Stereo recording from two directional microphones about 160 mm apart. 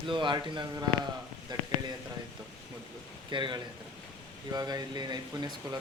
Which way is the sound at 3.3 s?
30° right (ahead or behind).